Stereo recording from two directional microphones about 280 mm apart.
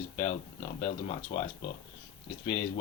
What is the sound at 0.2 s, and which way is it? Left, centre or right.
Speech, centre.